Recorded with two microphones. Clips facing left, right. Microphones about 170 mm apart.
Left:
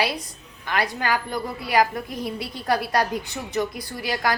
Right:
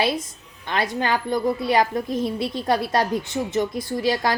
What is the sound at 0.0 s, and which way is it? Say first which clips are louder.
A woman's voice: right 3 dB; 25° right (ahead or behind).